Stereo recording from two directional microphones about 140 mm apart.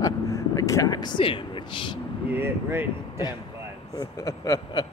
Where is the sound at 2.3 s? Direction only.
15° right (ahead or behind).